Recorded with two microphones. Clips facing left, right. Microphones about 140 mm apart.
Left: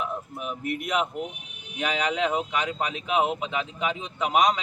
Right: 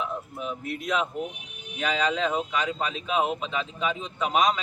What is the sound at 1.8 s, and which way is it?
Speech, 15° left (ahead or behind).